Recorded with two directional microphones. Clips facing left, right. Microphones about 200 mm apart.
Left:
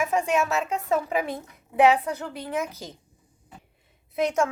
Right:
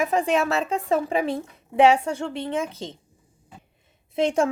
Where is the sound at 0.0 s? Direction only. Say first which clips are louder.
Right 2 dB; 35° right (ahead or behind).